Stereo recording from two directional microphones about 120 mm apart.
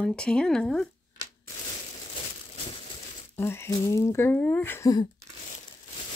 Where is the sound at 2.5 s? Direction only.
50° left (ahead or behind).